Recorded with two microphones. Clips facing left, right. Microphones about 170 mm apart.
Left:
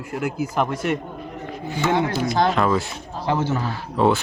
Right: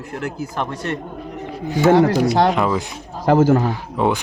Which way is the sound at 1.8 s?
35° right (ahead or behind).